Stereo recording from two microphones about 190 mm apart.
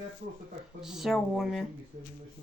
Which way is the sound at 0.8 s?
Centre (ahead or behind).